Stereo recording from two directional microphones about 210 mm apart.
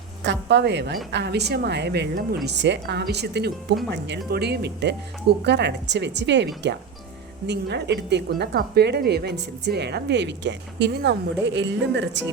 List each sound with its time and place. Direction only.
0.3 s a woman's voice: 55° right (ahead or behind)